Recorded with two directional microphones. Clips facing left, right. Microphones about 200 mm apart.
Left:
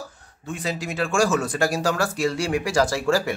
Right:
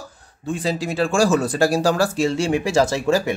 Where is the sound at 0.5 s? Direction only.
30° right (ahead or behind).